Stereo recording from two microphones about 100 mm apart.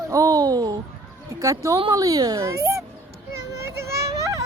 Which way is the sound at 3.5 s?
30° right (ahead or behind).